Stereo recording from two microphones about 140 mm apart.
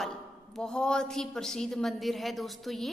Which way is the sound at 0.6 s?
5° left (ahead or behind).